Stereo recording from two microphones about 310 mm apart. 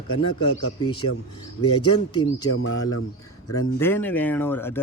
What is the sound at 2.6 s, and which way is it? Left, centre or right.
Speech, left.